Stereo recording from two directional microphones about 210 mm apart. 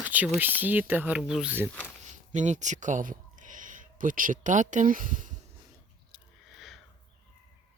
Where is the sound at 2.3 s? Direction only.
35° right (ahead or behind).